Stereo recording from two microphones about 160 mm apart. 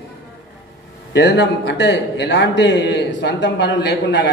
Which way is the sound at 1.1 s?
90° left.